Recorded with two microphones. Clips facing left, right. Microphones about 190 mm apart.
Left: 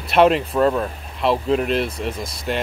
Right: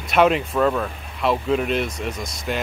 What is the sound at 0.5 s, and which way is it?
Speech, 25° left (ahead or behind).